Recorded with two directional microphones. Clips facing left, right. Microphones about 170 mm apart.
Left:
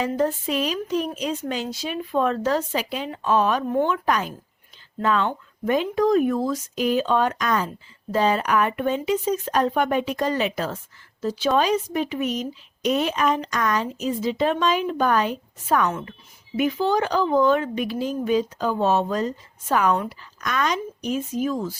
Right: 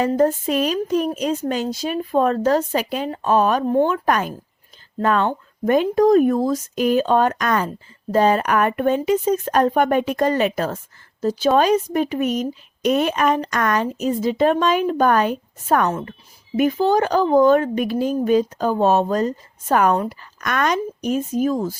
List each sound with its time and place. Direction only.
0.0 s speech: 45° right (ahead or behind)
15.9 s a woman's voice: 35° right (ahead or behind)